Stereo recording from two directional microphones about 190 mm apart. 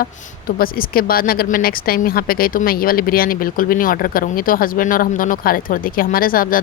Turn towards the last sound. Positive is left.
turn(degrees=50)  # may be behind; listen again after turning